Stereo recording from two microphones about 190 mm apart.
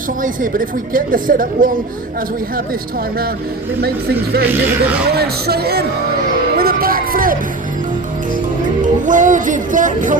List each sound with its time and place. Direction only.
0.2 s a woman's voice: 45° right (ahead or behind)
5.1 s speech: 55° right (ahead or behind)
6.6 s a sound: 50° right (ahead or behind)
8.8 s music: 45° right (ahead or behind)